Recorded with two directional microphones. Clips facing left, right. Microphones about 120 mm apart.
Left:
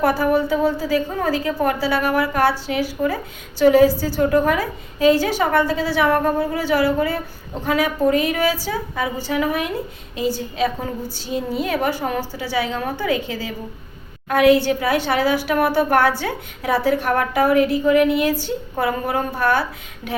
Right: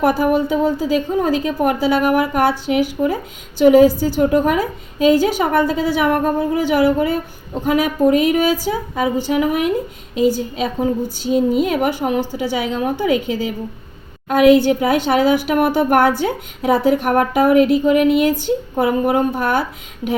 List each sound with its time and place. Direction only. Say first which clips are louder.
0.0 s a woman's voice: right 2 dB; 15° right (ahead or behind)